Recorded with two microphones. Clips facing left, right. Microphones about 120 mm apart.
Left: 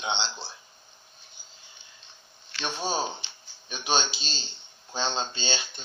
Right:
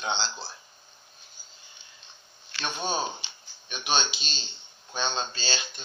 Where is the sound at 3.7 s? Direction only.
25° left (ahead or behind).